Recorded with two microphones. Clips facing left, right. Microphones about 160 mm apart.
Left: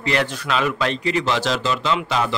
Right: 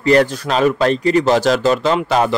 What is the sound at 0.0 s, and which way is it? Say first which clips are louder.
A man's voice: right 9 dB; 40° right (ahead or behind).